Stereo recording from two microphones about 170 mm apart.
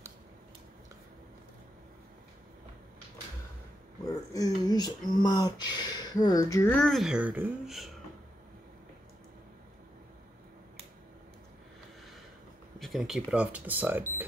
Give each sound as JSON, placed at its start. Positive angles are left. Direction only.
{"t": 4.3, "sound": "speech", "side_deg": 20}
{"t": 12.7, "sound": "speech", "side_deg": 0}